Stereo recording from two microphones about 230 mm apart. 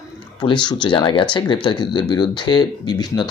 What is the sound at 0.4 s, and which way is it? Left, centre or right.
A man's voice, centre.